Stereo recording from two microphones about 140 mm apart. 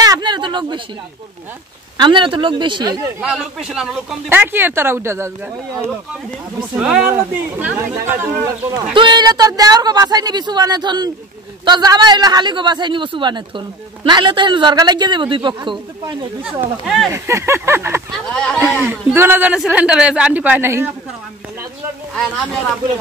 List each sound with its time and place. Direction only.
0.0 s a sound: 30° right (ahead or behind)
2.0 s a man's voice: 35° right (ahead or behind)
3.2 s speech: 5° right (ahead or behind)
4.3 s a man's voice: 15° right (ahead or behind)
6.8 s a man's voice: 10° right (ahead or behind)
8.9 s a man's voice: 30° right (ahead or behind)
16.8 s speech: centre (ahead or behind)
17.1 s speech: 20° right (ahead or behind)
18.1 s speech: 5° left (ahead or behind)
18.6 s a man's voice: 15° right (ahead or behind)